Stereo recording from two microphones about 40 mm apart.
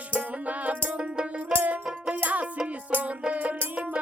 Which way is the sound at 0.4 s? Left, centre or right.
Right.